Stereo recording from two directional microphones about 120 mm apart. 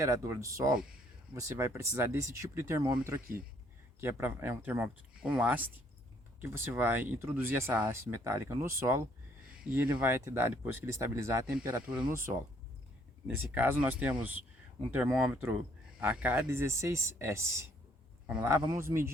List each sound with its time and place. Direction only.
0.0 s speech: 25° right (ahead or behind)
11.4 s speech: 5° right (ahead or behind)
13.2 s speech: 15° right (ahead or behind)
18.8 s speech: 20° right (ahead or behind)